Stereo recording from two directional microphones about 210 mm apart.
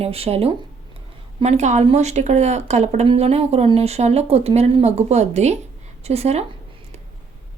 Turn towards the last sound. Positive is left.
turn(degrees=-30)  # may be behind; listen again after turning